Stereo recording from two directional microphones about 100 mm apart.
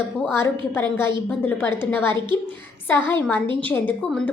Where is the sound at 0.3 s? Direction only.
25° left (ahead or behind).